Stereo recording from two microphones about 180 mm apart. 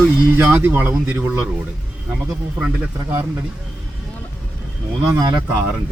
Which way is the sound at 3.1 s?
15° right (ahead or behind).